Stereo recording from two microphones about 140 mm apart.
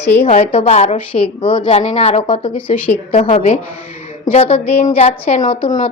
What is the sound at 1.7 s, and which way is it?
A woman's voice, 55° left (ahead or behind).